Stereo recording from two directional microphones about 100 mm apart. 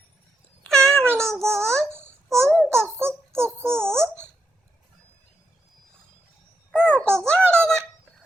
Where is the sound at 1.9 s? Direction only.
25° right (ahead or behind).